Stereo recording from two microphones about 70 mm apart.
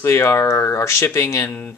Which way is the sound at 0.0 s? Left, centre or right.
Left.